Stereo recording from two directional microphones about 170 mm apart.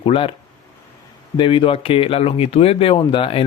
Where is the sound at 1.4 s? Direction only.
30° left (ahead or behind).